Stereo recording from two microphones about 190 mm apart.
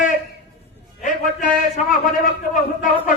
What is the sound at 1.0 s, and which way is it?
A man's voice, 45° left (ahead or behind).